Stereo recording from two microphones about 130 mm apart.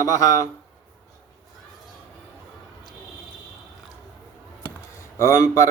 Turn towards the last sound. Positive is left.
turn(degrees=20)  # may be behind; listen again after turning